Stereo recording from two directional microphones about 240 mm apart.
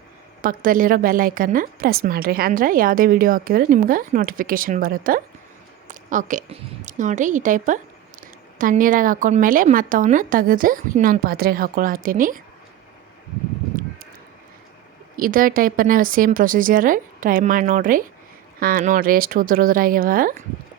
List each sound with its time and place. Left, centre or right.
0.4 s a woman's voice: right
15.1 s a woman's voice: right